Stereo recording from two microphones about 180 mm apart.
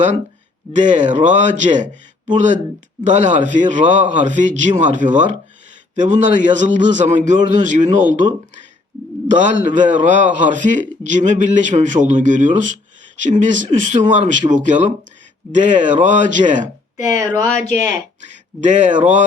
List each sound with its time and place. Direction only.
0.7 s a man's voice: 40° right (ahead or behind)
17.0 s speech: 20° right (ahead or behind)
17.5 s speech: 40° left (ahead or behind)
18.2 s speech: 40° right (ahead or behind)